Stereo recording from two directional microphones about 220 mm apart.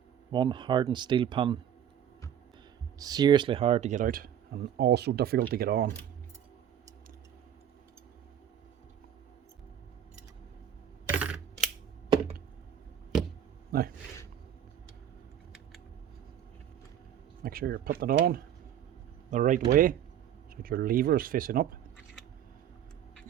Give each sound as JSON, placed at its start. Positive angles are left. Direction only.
{"t": 0.3, "sound": "speech", "side_deg": -20}
{"t": 3.0, "sound": "speech", "side_deg": -15}
{"t": 11.2, "sound": "coin", "side_deg": -5}
{"t": 13.7, "sound": "a sound", "side_deg": -40}
{"t": 17.4, "sound": "speech", "side_deg": -45}